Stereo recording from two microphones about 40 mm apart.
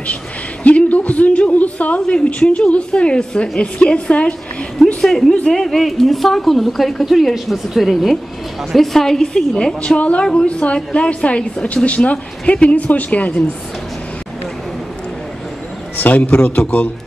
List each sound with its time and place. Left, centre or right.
0.7 s a sound: left
2.0 s a woman's voice: left
5.0 s a woman's voice: centre
9.9 s a woman's voice: left
16.0 s a woman's voice: left